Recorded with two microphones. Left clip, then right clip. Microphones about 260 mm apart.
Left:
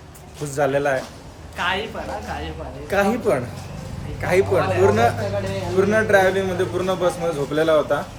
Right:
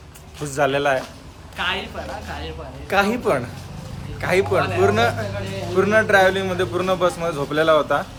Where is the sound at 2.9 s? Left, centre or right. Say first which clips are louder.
Even; centre.